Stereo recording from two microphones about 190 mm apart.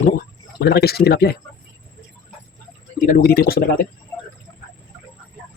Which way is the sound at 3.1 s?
50° left (ahead or behind).